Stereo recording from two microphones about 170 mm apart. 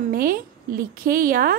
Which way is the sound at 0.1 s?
55° right (ahead or behind).